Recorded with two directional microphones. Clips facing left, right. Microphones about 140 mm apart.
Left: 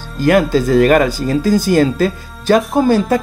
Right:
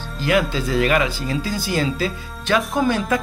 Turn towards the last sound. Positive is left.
turn(degrees=35)  # may be behind; listen again after turning